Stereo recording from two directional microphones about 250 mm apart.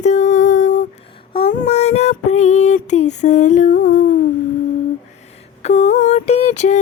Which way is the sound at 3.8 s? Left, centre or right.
Left.